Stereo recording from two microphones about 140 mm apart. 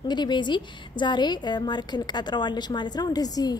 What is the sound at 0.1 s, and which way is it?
A woman's voice, 30° left (ahead or behind).